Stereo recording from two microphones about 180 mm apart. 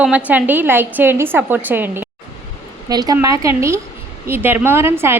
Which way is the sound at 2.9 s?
20° right (ahead or behind).